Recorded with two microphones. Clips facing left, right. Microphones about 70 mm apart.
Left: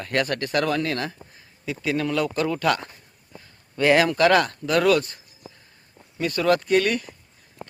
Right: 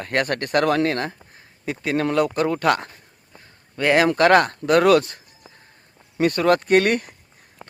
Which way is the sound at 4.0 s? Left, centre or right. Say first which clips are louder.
Right 6 dB; right.